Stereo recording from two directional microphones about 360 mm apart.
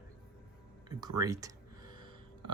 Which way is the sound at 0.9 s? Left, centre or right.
Centre.